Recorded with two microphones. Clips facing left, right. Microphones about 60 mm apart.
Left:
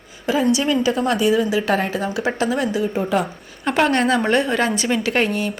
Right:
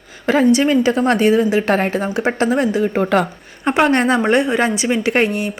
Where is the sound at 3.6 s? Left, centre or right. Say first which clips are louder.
Right 3 dB; right.